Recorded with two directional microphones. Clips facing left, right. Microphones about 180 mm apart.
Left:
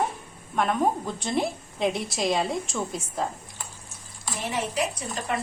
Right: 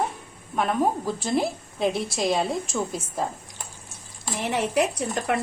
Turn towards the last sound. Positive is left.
turn(degrees=-65)  # may be behind; listen again after turning